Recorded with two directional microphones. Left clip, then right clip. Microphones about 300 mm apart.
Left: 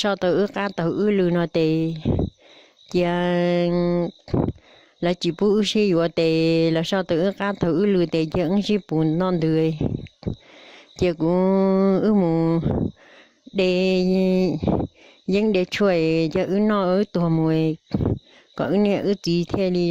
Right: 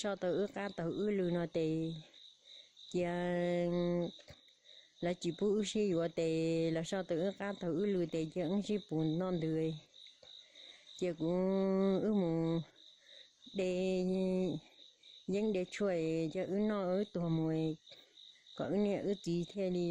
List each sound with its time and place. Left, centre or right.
0.0 s speech: left